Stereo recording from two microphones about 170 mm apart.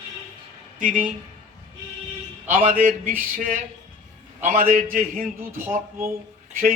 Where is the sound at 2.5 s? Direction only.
55° right (ahead or behind).